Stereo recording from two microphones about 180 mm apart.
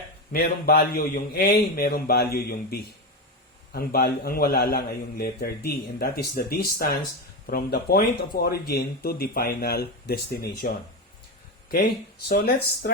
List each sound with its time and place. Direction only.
0.3 s a man's voice: 60° left (ahead or behind)
12.3 s a man's voice: 60° left (ahead or behind)